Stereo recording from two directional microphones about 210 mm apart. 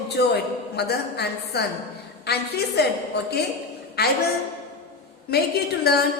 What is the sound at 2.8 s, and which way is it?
A woman's voice, 50° left (ahead or behind).